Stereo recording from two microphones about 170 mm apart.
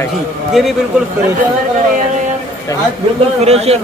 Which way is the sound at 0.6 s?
Centre (ahead or behind).